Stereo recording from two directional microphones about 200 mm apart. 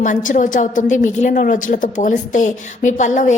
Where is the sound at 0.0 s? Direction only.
40° left (ahead or behind).